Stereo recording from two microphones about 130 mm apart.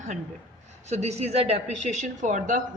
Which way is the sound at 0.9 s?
60° right (ahead or behind).